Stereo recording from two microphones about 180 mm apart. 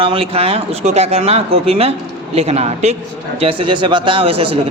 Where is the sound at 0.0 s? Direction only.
30° right (ahead or behind).